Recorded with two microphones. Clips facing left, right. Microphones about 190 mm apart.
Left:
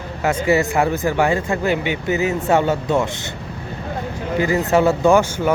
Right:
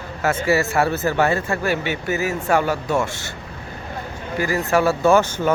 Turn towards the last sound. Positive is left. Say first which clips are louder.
# left 1 dB
turn(degrees=10)  # may be behind; listen again after turning